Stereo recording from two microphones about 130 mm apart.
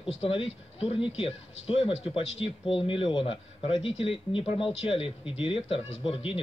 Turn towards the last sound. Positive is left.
turn(degrees=45)  # may be behind; listen again after turning